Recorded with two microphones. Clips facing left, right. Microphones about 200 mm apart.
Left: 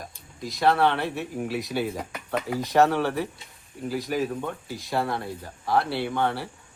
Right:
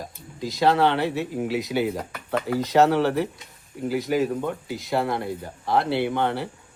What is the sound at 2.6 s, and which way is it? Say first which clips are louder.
Speech: right 2 dB; centre (ahead or behind).